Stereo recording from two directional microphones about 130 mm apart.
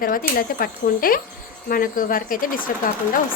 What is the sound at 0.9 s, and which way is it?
Speech, 90° left.